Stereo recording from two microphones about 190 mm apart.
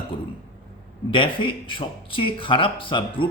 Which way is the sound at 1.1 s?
25° left (ahead or behind).